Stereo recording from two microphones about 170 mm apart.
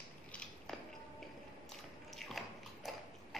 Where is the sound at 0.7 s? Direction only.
5° left (ahead or behind).